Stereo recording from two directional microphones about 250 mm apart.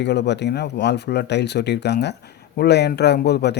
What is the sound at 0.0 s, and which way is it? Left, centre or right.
Speech, left.